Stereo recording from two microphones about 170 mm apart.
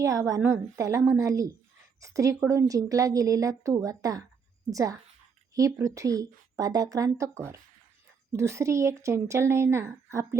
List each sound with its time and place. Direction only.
0.0 s speech: 20° right (ahead or behind)